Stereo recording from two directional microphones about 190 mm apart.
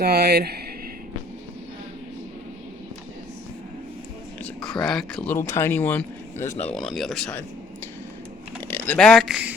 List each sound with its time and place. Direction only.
0.0 s speech: 55° right (ahead or behind)
4.4 s speech: 5° left (ahead or behind)
6.7 s speech: centre (ahead or behind)
8.6 s speech: 10° left (ahead or behind)